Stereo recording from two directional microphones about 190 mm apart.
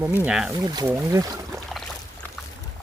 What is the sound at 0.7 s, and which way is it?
Speech, 20° right (ahead or behind).